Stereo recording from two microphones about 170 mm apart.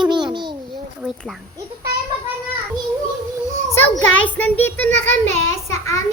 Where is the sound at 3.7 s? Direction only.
10° left (ahead or behind).